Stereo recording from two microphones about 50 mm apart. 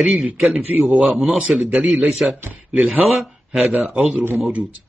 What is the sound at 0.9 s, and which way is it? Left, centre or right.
Speech, centre.